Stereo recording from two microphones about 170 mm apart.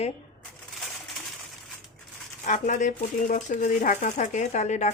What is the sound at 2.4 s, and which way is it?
Speech, 45° left (ahead or behind).